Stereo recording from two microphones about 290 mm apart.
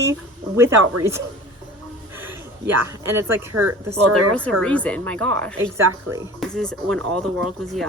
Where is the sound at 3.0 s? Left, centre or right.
Right.